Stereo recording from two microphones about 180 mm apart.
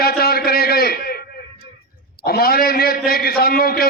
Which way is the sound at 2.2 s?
60° left (ahead or behind).